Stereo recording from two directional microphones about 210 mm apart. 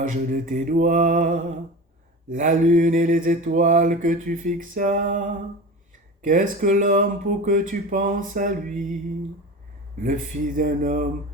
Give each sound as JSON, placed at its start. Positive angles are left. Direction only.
{"t": 0.0, "sound": "mantra", "side_deg": -40}
{"t": 6.2, "sound": "mantra", "side_deg": -40}
{"t": 10.0, "sound": "mantra", "side_deg": -40}